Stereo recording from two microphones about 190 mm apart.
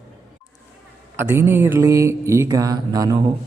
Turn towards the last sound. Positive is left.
turn(degrees=-20)  # may be behind; listen again after turning